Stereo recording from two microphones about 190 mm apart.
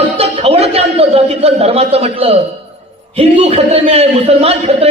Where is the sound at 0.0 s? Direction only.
30° right (ahead or behind).